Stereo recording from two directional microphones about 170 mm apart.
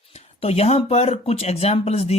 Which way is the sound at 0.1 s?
35° left (ahead or behind).